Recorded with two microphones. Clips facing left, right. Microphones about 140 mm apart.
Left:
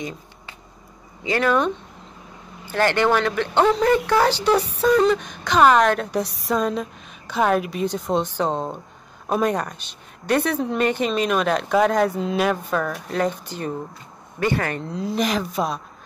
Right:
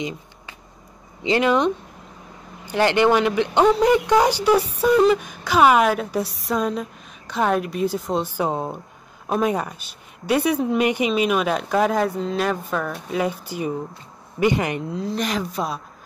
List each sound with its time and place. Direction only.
1.2 s speech: 20° right (ahead or behind)
14.8 s speech: centre (ahead or behind)